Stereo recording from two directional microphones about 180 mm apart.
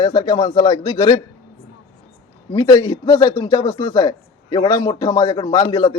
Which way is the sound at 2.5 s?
20° left (ahead or behind).